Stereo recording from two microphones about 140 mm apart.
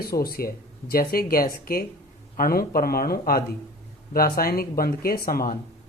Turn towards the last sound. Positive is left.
turn(degrees=90)